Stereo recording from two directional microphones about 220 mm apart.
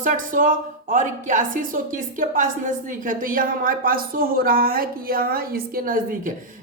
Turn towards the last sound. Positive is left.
turn(degrees=-40)  # may be behind; listen again after turning